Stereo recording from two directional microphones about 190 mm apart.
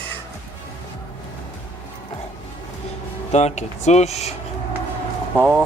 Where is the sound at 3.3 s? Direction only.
35° left (ahead or behind).